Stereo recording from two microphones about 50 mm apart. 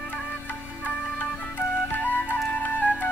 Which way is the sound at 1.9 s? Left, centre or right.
Left.